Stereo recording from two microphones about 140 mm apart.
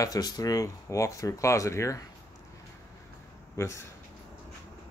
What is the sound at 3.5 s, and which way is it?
Speech, 20° left (ahead or behind).